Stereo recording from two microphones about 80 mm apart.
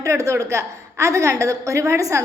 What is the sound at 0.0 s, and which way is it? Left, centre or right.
A woman's voice, right.